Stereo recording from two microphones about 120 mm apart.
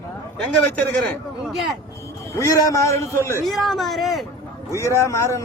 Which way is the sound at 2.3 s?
25° left (ahead or behind).